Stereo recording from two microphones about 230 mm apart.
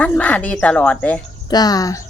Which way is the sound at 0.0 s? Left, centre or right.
Centre.